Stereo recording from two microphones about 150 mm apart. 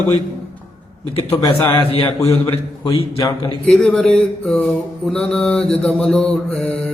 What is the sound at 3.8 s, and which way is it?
Mantra, 5° left (ahead or behind).